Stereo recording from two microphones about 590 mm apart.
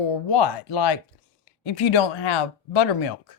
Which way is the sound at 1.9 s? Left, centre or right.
Left.